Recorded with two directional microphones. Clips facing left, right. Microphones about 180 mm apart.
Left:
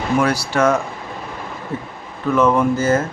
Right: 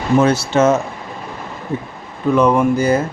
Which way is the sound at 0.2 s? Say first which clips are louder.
Right 4 dB; 25° right (ahead or behind).